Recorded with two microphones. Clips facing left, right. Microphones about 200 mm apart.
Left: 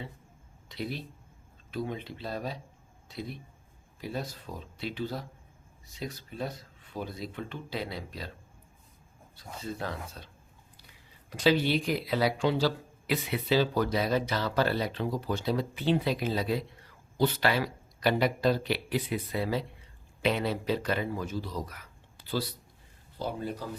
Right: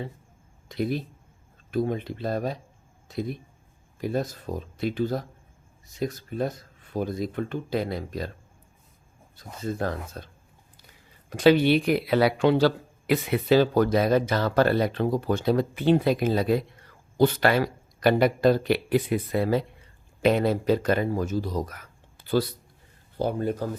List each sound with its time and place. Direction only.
0.7 s speech: 50° right (ahead or behind)
9.6 s speech: 50° right (ahead or behind)
11.3 s speech: 55° right (ahead or behind)